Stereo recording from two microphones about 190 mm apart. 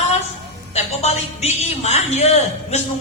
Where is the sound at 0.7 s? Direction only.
35° left (ahead or behind).